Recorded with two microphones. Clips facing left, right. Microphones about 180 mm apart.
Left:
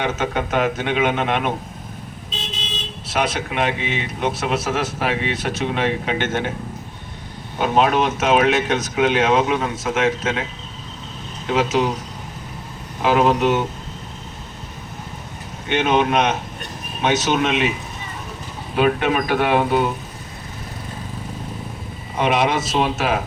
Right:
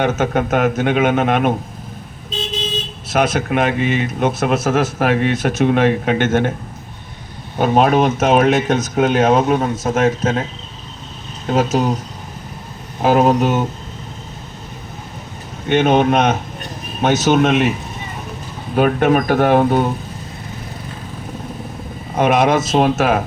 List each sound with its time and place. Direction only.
0.0 s speech: 45° right (ahead or behind)
3.1 s speech: 45° right (ahead or behind)
7.6 s speech: 45° right (ahead or behind)
11.4 s speech: 40° right (ahead or behind)
13.0 s speech: 45° right (ahead or behind)
15.7 s speech: 45° right (ahead or behind)
18.8 s speech: 45° right (ahead or behind)
22.1 s speech: 45° right (ahead or behind)